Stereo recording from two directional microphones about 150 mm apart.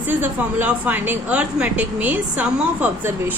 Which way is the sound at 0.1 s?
15° right (ahead or behind).